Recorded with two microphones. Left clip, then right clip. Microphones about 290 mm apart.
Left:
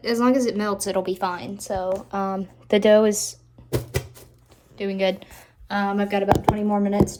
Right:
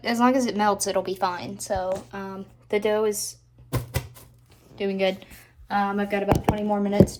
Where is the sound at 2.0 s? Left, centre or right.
Centre.